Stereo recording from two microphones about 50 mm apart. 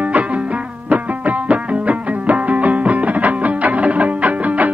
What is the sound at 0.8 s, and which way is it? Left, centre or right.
Music, right.